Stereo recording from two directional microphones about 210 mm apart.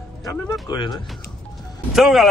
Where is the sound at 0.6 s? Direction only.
20° left (ahead or behind).